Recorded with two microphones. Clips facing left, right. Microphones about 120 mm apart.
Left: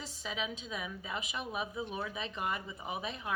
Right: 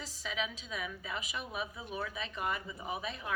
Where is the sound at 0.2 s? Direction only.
30° left (ahead or behind).